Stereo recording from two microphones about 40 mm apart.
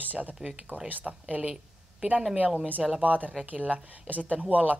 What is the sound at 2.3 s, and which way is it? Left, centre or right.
Speech, right.